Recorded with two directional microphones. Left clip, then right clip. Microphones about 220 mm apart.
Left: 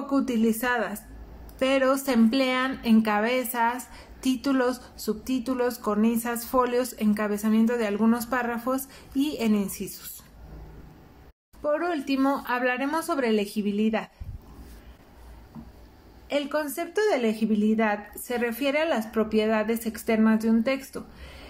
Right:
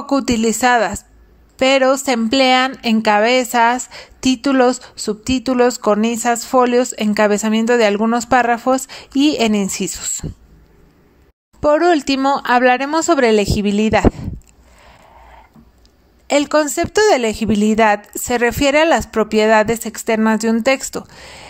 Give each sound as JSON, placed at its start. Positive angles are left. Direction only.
{"t": 0.0, "sound": "a woman's voice", "side_deg": -35}
{"t": 11.6, "sound": "a woman's voice", "side_deg": -40}
{"t": 16.3, "sound": "a woman's voice", "side_deg": -45}